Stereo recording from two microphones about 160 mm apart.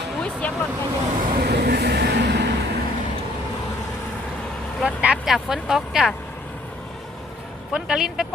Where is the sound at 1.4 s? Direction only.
85° right.